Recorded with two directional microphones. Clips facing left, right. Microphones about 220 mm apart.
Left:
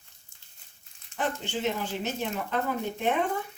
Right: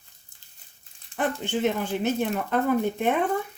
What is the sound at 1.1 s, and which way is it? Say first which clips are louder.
A woman's voice: right 4 dB; 55° right (ahead or behind).